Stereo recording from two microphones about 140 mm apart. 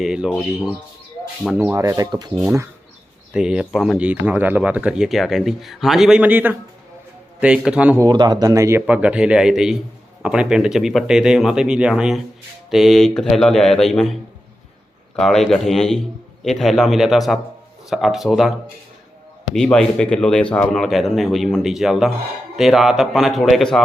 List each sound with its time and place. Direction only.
0.0 s speech: 5° right (ahead or behind)
1.5 s speech: 20° right (ahead or behind)
3.3 s speech: 5° right (ahead or behind)
8.0 s speech: 30° right (ahead or behind)
8.9 s speech: 10° right (ahead or behind)
19.5 s speech: 5° left (ahead or behind)